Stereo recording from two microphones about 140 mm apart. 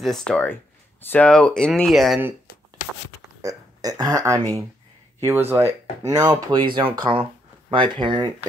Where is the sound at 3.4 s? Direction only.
25° right (ahead or behind).